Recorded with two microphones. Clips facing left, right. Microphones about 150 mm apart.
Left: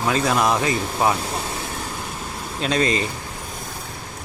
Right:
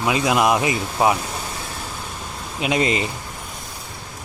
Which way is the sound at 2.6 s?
15° right (ahead or behind).